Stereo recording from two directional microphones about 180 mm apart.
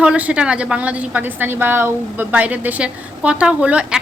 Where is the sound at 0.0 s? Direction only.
5° right (ahead or behind).